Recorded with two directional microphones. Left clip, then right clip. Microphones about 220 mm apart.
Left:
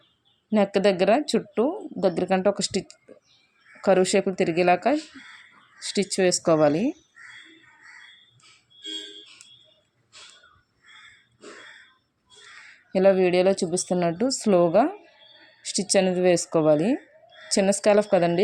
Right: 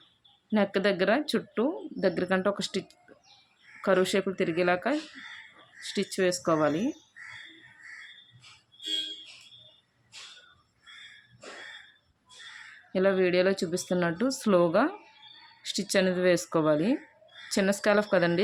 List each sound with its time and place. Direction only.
0.5 s speech: 20° left (ahead or behind)
12.9 s speech: 20° left (ahead or behind)